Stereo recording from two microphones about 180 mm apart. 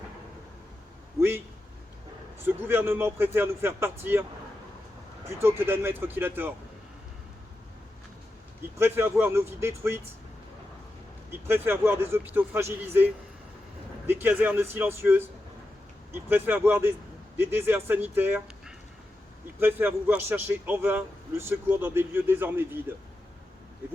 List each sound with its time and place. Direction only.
2.4 s speech: 10° right (ahead or behind)
5.4 s speech: 15° right (ahead or behind)
8.8 s speech: 15° right (ahead or behind)
11.3 s speech: 10° right (ahead or behind)
14.1 s speech: 10° right (ahead or behind)